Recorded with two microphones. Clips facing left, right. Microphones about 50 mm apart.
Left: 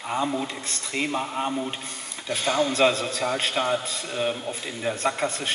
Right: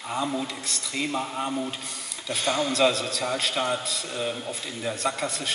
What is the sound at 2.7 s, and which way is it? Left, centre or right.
A man's voice, left.